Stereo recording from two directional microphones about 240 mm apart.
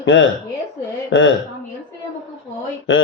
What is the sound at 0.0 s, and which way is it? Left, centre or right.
Speech, left.